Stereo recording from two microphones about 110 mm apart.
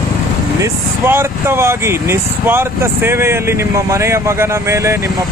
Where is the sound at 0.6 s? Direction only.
20° right (ahead or behind).